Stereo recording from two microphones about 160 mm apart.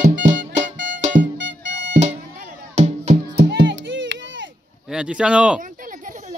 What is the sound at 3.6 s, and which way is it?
Music, 90° right.